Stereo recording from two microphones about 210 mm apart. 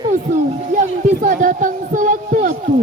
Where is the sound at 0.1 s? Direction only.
35° right (ahead or behind).